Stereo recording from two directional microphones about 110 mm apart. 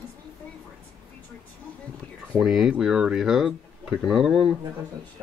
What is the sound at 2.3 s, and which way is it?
Speech, 5° right (ahead or behind).